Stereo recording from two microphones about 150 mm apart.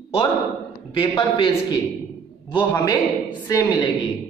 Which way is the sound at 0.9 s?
35° left (ahead or behind).